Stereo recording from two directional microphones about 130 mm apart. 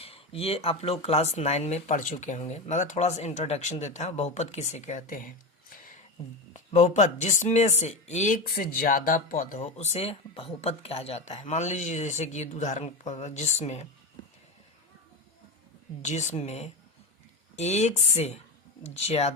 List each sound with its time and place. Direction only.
0.0 s speech: 50° left (ahead or behind); by 5.3 s 90° left
6.5 s speech: 65° left (ahead or behind)
16.0 s speech: 65° left (ahead or behind)